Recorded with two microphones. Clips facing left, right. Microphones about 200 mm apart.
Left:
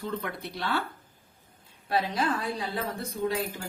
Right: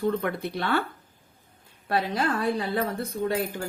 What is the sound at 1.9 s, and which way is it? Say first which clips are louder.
A woman's voice: right 2 dB; 55° right (ahead or behind).